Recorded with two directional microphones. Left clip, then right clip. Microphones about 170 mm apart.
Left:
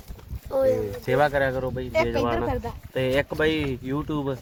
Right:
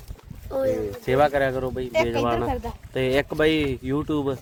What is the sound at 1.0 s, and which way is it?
Speech, 50° right (ahead or behind).